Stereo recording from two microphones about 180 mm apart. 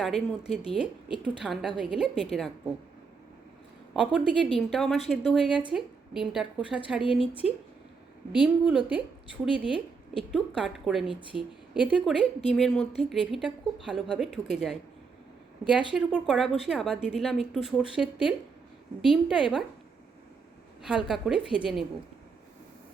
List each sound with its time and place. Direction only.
0.0 s speech: centre (ahead or behind)
3.9 s speech: 5° right (ahead or behind)
7.0 s a woman's voice: 30° left (ahead or behind)
8.4 s a woman's voice: 5° right (ahead or behind)
15.9 s speech: 5° right (ahead or behind)
20.8 s speech: 5° right (ahead or behind)